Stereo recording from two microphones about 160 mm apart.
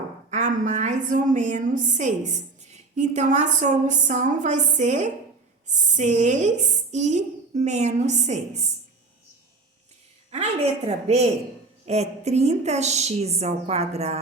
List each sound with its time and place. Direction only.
0.3 s a woman's voice: 50° right (ahead or behind)
10.3 s a woman's voice: 40° right (ahead or behind)